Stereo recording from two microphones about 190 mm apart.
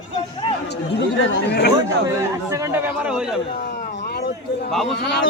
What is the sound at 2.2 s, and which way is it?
A man's voice, 15° right (ahead or behind).